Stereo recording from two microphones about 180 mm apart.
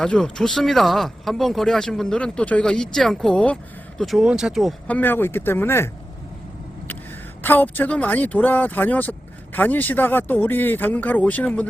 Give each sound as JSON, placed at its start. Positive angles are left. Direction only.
{"t": 0.0, "sound": "speech", "side_deg": 5}
{"t": 4.9, "sound": "speech", "side_deg": 10}
{"t": 7.4, "sound": "speech", "side_deg": 10}